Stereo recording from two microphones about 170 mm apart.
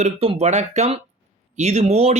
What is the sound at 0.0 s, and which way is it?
Speech, 35° right (ahead or behind).